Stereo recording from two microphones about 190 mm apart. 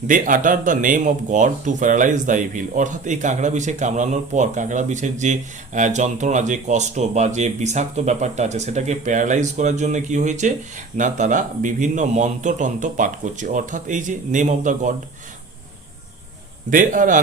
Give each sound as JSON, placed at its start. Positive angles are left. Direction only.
{"t": 0.1, "sound": "speech", "side_deg": -45}
{"t": 16.6, "sound": "a man's voice", "side_deg": -45}